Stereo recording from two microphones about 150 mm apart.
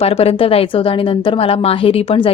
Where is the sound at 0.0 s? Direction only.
40° left (ahead or behind).